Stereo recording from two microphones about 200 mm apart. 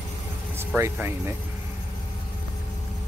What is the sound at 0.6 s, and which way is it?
Speech, 10° right (ahead or behind).